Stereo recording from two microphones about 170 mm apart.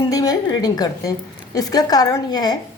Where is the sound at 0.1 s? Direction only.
20° left (ahead or behind).